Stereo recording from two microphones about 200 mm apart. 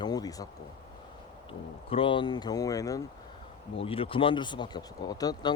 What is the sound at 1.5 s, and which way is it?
Speech, 25° left (ahead or behind).